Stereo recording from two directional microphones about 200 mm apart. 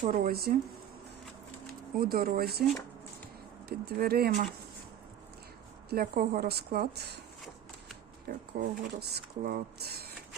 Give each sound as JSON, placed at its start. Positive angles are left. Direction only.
{"t": 0.0, "sound": "speech", "side_deg": -45}
{"t": 2.0, "sound": "speech", "side_deg": -50}
{"t": 3.7, "sound": "speech", "side_deg": -50}
{"t": 5.9, "sound": "speech", "side_deg": -50}
{"t": 8.3, "sound": "speech", "side_deg": -55}